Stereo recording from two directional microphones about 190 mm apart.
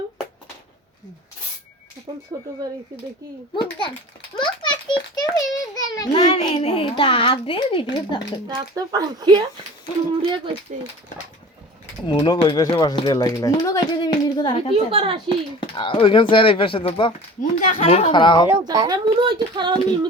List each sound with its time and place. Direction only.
2.3 s speech: 20° right (ahead or behind)
3.5 s a child's voice: 25° left (ahead or behind)
8.4 s speech: 20° right (ahead or behind)
12.0 s speech: 25° left (ahead or behind)
14.8 s speech: 30° right (ahead or behind)
15.7 s speech: 25° left (ahead or behind)
17.4 s speech: 40° left (ahead or behind); by 18.4 s 25° left (ahead or behind)
18.4 s speech: 15° right (ahead or behind)